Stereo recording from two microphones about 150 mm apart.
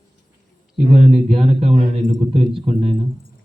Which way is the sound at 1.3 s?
40° right (ahead or behind).